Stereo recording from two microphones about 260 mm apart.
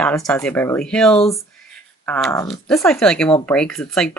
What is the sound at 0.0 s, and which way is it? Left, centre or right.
Speech, centre.